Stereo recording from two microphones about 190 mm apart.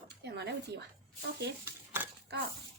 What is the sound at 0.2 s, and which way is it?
Speech, 60° right (ahead or behind).